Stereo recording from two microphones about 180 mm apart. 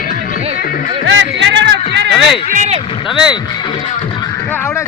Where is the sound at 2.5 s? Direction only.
45° right (ahead or behind).